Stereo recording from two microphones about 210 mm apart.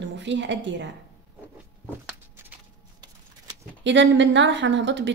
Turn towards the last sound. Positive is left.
turn(degrees=-60)  # may be behind; listen again after turning